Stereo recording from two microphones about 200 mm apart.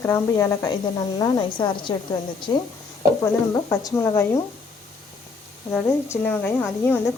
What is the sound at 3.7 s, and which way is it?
Speech, 15° left (ahead or behind).